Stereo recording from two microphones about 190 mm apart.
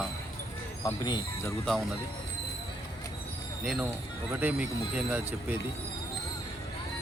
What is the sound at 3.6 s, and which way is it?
A man's voice, 5° right (ahead or behind).